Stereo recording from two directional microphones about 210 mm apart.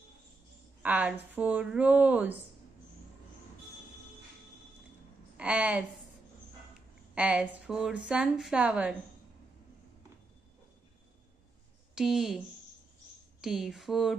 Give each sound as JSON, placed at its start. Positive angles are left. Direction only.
{"t": 0.8, "sound": "speech", "side_deg": -5}
{"t": 5.4, "sound": "a woman's voice", "side_deg": -5}
{"t": 7.2, "sound": "a woman's voice", "side_deg": -5}
{"t": 11.9, "sound": "a woman's voice", "side_deg": 0}
{"t": 13.4, "sound": "a woman's voice", "side_deg": 0}